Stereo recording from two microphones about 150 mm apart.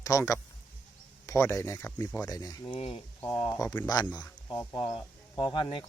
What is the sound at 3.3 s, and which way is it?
A man's voice, 25° left (ahead or behind).